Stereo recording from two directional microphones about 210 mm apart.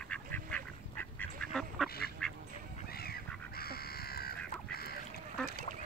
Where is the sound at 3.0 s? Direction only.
45° left (ahead or behind).